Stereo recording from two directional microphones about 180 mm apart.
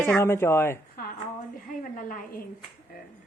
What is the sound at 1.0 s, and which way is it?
A woman's voice, 55° left (ahead or behind).